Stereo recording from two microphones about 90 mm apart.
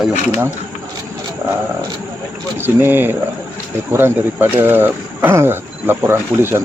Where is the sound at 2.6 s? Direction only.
20° right (ahead or behind).